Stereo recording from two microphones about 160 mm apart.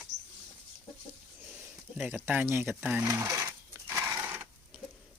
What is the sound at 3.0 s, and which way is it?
Sewing machine, 20° right (ahead or behind).